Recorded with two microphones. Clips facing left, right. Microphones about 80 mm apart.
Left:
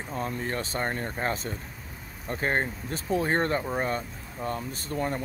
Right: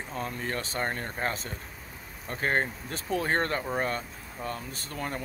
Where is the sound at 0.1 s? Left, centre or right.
Left.